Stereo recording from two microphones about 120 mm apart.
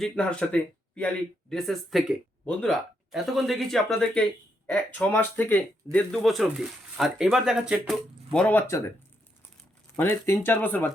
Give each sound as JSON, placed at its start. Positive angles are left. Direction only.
{"t": 0.0, "sound": "speech", "side_deg": 10}
{"t": 2.4, "sound": "speech", "side_deg": 10}
{"t": 3.1, "sound": "speech", "side_deg": 0}
{"t": 4.6, "sound": "speech", "side_deg": 15}
{"t": 8.3, "sound": "speech", "side_deg": 10}
{"t": 9.9, "sound": "speech", "side_deg": 20}